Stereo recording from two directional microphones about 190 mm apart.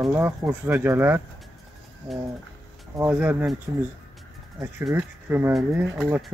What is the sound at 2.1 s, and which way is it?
Speech, centre (ahead or behind).